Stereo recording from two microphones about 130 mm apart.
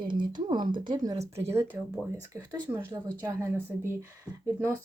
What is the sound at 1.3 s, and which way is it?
Speech, 20° right (ahead or behind).